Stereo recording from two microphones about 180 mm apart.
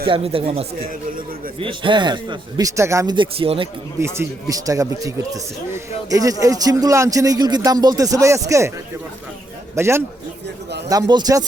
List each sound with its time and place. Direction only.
0.0 s speech: 30° right (ahead or behind)
4.0 s speech: 15° right (ahead or behind)
9.7 s a man's voice: 15° right (ahead or behind)